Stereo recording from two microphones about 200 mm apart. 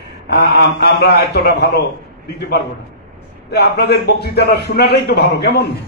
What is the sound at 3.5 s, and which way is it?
A man's voice, 55° left (ahead or behind).